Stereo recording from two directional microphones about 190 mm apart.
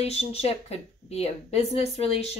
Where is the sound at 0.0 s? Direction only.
35° left (ahead or behind).